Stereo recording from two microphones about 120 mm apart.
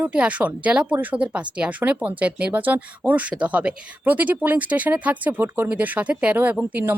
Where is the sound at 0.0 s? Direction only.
10° right (ahead or behind).